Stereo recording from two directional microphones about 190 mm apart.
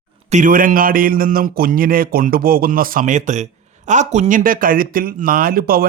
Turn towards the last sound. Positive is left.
turn(degrees=-50)  # may be behind; listen again after turning